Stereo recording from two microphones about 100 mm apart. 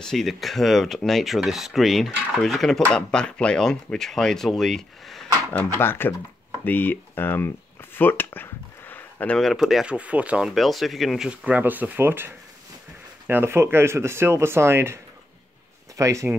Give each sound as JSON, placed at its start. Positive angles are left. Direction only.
{"t": 0.0, "sound": "speech", "side_deg": 5}
{"t": 5.8, "sound": "speech", "side_deg": 20}
{"t": 6.6, "sound": "a sound", "side_deg": 20}
{"t": 9.4, "sound": "speech", "side_deg": 0}
{"t": 9.9, "sound": "speech", "side_deg": -15}
{"t": 10.5, "sound": "speech", "side_deg": 0}
{"t": 11.2, "sound": "speech", "side_deg": -15}
{"t": 16.0, "sound": "speech", "side_deg": -30}